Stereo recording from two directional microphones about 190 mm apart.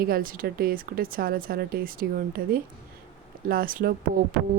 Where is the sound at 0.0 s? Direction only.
50° right (ahead or behind).